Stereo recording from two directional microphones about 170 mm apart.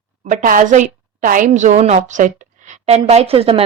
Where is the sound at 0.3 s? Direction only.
50° right (ahead or behind).